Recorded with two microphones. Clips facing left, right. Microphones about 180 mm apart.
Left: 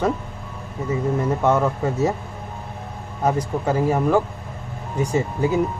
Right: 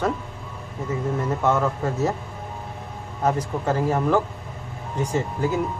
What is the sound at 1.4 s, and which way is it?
Speech, 15° left (ahead or behind).